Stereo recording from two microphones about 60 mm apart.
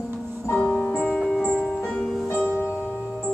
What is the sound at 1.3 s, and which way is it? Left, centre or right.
Music, centre.